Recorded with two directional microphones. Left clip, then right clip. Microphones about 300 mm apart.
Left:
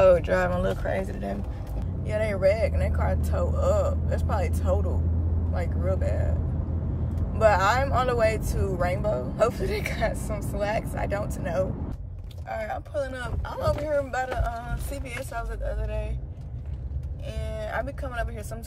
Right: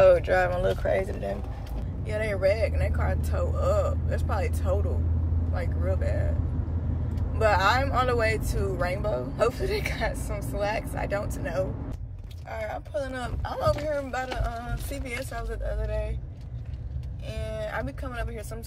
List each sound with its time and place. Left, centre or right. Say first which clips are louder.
0.0 s speech: even; centre
2.0 s speech: left 2 dB; centre
7.4 s speech: left 2 dB; centre
12.9 s speech: left 1 dB; centre
17.5 s speech: left 1 dB; centre